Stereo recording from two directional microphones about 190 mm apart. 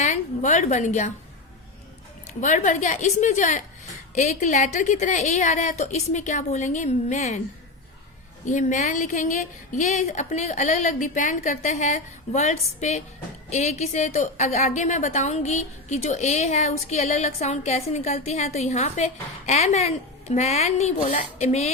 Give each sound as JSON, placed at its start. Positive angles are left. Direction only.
{"t": 0.0, "sound": "a woman's voice", "side_deg": 40}
{"t": 2.2, "sound": "a woman's voice", "side_deg": 40}
{"t": 8.4, "sound": "a woman's voice", "side_deg": 40}